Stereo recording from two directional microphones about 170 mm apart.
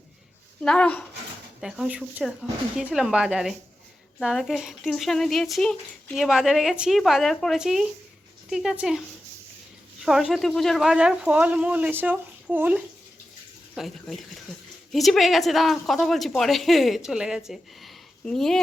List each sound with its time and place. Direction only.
0.6 s speech: 5° left (ahead or behind)
1.6 s speech: 5° right (ahead or behind)